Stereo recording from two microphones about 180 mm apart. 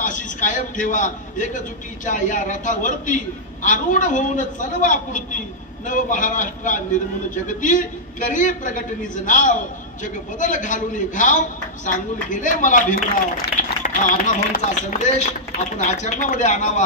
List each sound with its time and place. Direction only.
0.0 s a man's voice: 45° left (ahead or behind)